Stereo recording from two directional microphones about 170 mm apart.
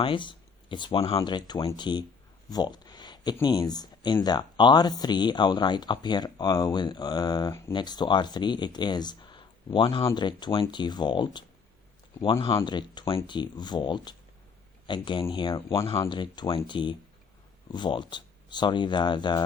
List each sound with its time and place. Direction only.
0.0 s speech: 30° left (ahead or behind)
2.5 s a sound: 25° left (ahead or behind)
3.4 s speech: 25° left (ahead or behind)